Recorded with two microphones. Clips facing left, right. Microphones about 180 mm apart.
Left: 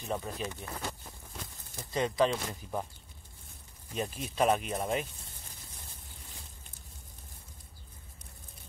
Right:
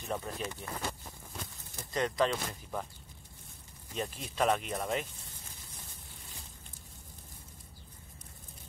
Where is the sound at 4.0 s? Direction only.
15° left (ahead or behind).